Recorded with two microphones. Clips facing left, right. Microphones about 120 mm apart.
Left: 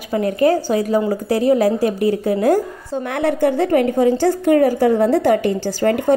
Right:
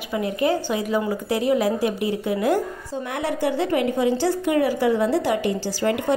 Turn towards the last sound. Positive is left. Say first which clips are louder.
# left 6 dB
turn(degrees=50)  # may be behind; listen again after turning